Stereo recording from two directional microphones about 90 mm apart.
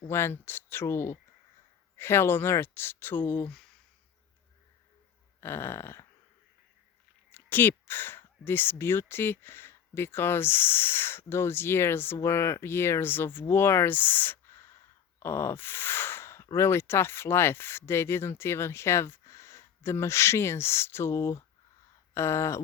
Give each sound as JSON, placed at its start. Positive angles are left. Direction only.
{"t": 0.1, "sound": "speech", "side_deg": 25}
{"t": 5.4, "sound": "speech", "side_deg": 25}
{"t": 7.3, "sound": "speech", "side_deg": 25}
{"t": 15.2, "sound": "gasp", "side_deg": 25}
{"t": 16.6, "sound": "speech", "side_deg": 25}
{"t": 22.1, "sound": "a sound", "side_deg": 30}